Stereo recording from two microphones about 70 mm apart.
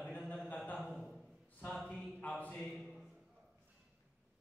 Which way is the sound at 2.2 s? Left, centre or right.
Left.